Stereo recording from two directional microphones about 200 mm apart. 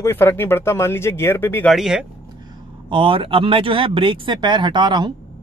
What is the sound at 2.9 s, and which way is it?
Speech, 25° right (ahead or behind).